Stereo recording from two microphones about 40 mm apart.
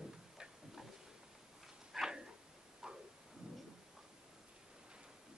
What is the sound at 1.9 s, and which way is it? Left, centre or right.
Dog, centre.